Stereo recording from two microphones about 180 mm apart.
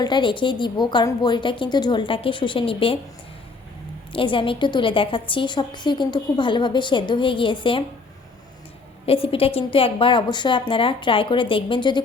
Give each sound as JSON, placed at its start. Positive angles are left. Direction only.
{"t": 0.0, "sound": "a woman's voice", "side_deg": 25}
{"t": 4.1, "sound": "a woman's voice", "side_deg": 30}
{"t": 9.0, "sound": "a woman's voice", "side_deg": 30}